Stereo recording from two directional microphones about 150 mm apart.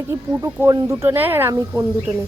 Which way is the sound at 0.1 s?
15° right (ahead or behind).